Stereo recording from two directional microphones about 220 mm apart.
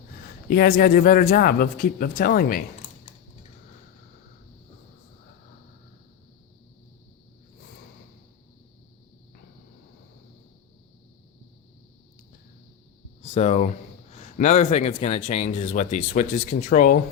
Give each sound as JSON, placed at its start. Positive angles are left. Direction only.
{"t": 0.5, "sound": "speech", "side_deg": 45}
{"t": 13.2, "sound": "speech", "side_deg": 30}